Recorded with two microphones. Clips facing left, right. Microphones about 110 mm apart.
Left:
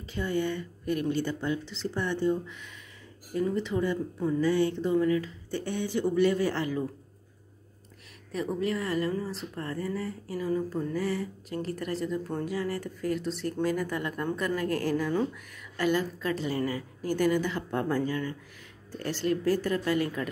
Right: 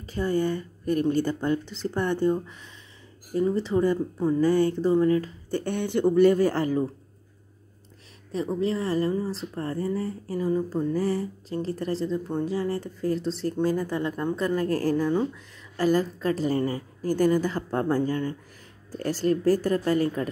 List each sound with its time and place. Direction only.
0.0 s speech: 40° right (ahead or behind)
3.3 s speech: 30° right (ahead or behind)
8.3 s speech: 30° right (ahead or behind)